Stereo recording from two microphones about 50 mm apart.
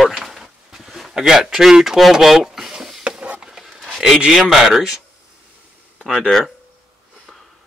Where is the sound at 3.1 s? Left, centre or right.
Right.